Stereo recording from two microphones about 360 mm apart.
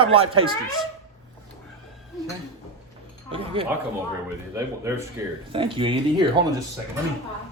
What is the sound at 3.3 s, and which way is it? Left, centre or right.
Speech, centre.